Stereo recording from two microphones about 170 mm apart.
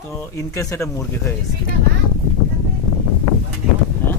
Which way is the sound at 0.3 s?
20° left (ahead or behind).